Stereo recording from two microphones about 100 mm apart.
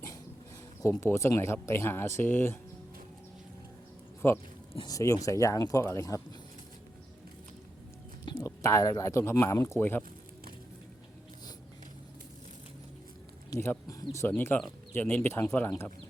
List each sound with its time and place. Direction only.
0.8 s speech: 25° left (ahead or behind)
4.2 s speech: 20° left (ahead or behind)
4.9 s speech: 35° left (ahead or behind)
8.2 s a sound: 45° left (ahead or behind)
8.4 s speech: 35° left (ahead or behind)
13.5 s speech: 40° left (ahead or behind)
14.2 s speech: 20° left (ahead or behind)